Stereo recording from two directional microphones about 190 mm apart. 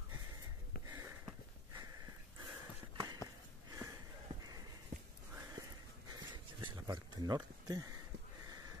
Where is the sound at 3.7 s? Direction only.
20° right (ahead or behind).